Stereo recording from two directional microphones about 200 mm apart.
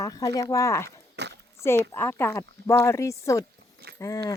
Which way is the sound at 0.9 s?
55° right (ahead or behind).